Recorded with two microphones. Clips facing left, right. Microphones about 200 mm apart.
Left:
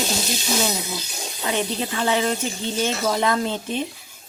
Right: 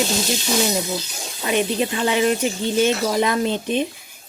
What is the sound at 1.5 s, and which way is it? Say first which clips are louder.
Speech: right 5 dB; 15° right (ahead or behind).